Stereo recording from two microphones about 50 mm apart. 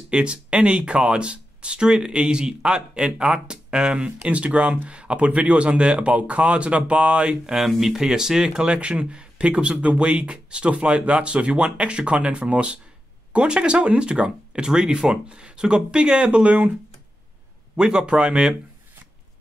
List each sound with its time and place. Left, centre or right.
0.1 s speech: right
7.5 s speech: centre; by 16.7 s right
17.7 s speech: centre